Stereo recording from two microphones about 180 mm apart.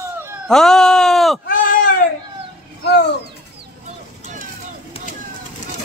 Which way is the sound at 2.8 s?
65° left (ahead or behind).